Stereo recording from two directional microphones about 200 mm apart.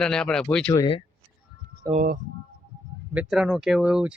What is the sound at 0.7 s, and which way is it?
Speech, 20° left (ahead or behind).